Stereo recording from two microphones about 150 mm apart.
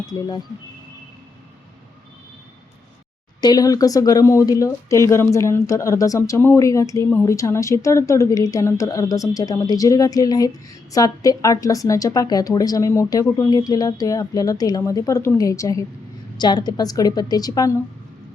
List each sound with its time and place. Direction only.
0.0 s speech: 25° left (ahead or behind)
3.4 s speech: 25° left (ahead or behind)